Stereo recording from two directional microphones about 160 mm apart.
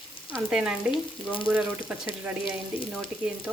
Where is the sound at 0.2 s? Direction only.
35° left (ahead or behind).